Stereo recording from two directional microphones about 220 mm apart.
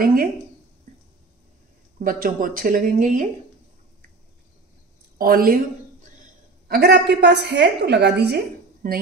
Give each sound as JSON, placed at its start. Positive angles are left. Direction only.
{"t": 0.0, "sound": "speech", "side_deg": -40}
{"t": 2.0, "sound": "speech", "side_deg": -40}
{"t": 5.2, "sound": "speech", "side_deg": -40}
{"t": 6.7, "sound": "a woman's voice", "side_deg": -50}